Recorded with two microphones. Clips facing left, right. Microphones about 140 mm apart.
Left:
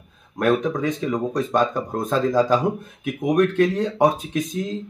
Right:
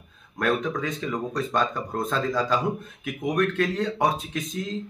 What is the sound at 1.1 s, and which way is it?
Speech, 15° left (ahead or behind).